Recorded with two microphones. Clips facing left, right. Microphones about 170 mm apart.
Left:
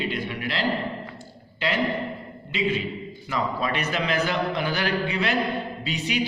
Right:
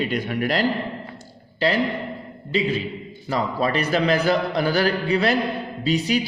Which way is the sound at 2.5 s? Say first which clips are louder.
Right 3 dB; 35° right (ahead or behind).